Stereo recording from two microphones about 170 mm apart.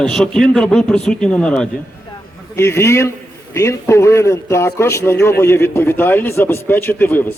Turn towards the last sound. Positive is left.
turn(degrees=10)  # may be behind; listen again after turning